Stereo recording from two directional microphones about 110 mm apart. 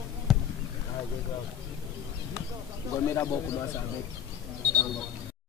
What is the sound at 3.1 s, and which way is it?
Speech, 30° left (ahead or behind).